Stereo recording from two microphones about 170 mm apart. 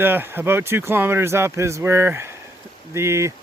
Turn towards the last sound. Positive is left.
turn(degrees=-15)  # may be behind; listen again after turning